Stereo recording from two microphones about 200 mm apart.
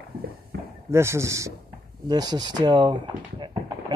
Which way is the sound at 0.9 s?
15° right (ahead or behind).